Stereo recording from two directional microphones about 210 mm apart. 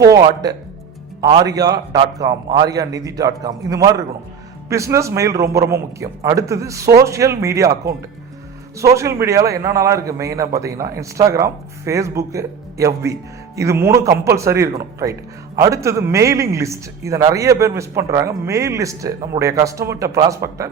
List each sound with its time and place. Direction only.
0.1 s a man's voice: 20° right (ahead or behind)